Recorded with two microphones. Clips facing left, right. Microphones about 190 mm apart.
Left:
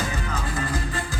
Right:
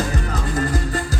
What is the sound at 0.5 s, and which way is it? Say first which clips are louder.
Music: right 8 dB; 40° right (ahead or behind).